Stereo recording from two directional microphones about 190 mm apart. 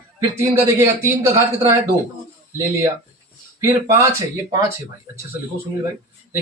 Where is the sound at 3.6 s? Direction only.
15° right (ahead or behind).